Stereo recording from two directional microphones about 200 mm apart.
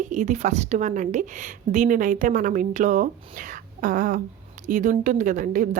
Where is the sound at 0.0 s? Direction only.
40° right (ahead or behind).